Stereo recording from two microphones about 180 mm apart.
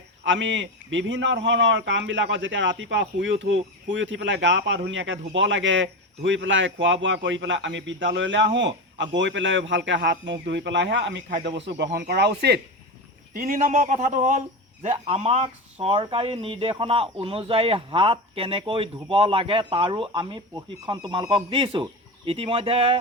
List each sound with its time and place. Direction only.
0.3 s a man's voice: 90° right; by 12.5 s 65° right (ahead or behind)
13.3 s speech: 50° right (ahead or behind)
14.8 s speech: 35° right (ahead or behind)